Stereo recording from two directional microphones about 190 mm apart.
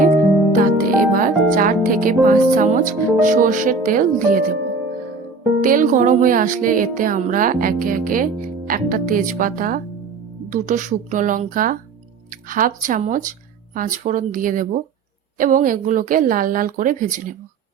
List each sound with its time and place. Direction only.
0.5 s music: 45° right (ahead or behind)
3.2 s speech: 45° right (ahead or behind)
5.6 s speech: 45° right (ahead or behind)